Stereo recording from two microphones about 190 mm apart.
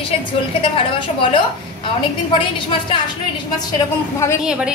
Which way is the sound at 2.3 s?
25° left (ahead or behind).